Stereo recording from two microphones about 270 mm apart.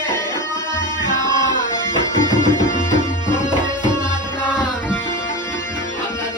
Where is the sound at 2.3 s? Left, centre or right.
Centre.